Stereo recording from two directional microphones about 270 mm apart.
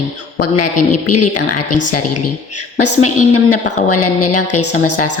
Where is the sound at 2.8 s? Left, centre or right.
Left.